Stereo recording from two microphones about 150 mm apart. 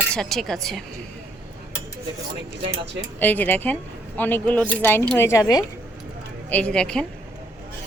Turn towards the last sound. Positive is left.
turn(degrees=5)  # may be behind; listen again after turning